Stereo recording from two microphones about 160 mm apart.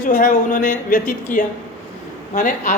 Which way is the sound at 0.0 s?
50° left (ahead or behind).